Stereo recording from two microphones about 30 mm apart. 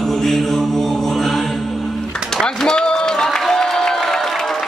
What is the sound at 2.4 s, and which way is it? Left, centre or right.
Run, left.